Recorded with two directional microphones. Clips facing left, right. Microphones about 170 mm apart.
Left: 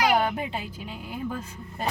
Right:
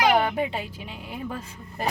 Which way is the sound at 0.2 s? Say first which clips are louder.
Right 2 dB; centre (ahead or behind).